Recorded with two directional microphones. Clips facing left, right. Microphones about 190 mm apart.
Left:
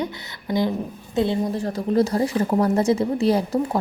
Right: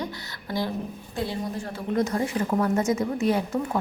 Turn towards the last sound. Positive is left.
turn(degrees=35)  # may be behind; listen again after turning